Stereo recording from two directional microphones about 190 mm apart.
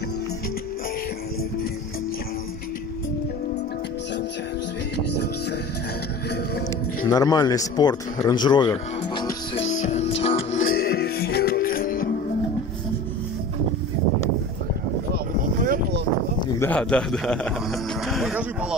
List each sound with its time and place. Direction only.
7.1 s speech: 20° left (ahead or behind)
8.3 s music: 25° left (ahead or behind)
9.7 s music: 40° left (ahead or behind)
10.6 s music: 50° left (ahead or behind)
15.1 s vehicle: 50° right (ahead or behind)
16.3 s speech: 10° left (ahead or behind); by 18.8 s 5° right (ahead or behind)